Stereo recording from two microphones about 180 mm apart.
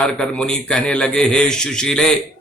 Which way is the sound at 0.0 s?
5° left (ahead or behind).